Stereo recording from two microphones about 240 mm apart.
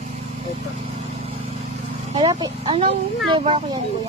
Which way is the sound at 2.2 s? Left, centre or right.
Centre.